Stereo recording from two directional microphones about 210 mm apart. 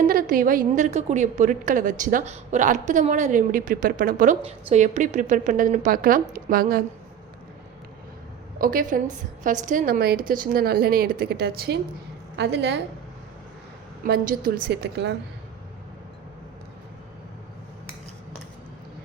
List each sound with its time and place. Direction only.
0.1 s a woman's voice: 45° right (ahead or behind)
8.5 s a woman's voice: 40° right (ahead or behind)
14.0 s a woman's voice: 40° right (ahead or behind)